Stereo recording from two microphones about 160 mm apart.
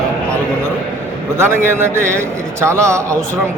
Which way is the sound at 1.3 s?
15° right (ahead or behind).